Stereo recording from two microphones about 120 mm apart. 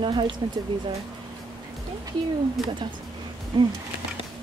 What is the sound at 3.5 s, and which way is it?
Speech, 45° right (ahead or behind).